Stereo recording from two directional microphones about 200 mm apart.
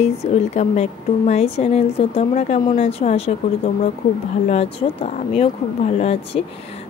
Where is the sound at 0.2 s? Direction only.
35° left (ahead or behind).